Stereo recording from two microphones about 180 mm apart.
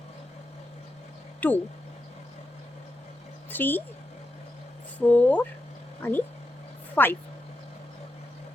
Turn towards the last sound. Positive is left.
turn(degrees=10)  # may be behind; listen again after turning